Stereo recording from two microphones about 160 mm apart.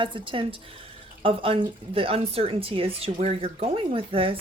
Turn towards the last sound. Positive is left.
turn(degrees=-35)  # may be behind; listen again after turning